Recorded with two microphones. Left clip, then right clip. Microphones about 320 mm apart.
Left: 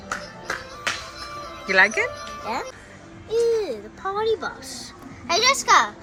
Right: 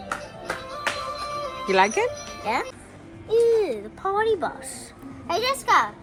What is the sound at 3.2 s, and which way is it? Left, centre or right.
Music, right.